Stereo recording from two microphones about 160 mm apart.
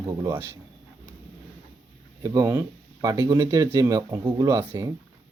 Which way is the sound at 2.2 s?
20° right (ahead or behind).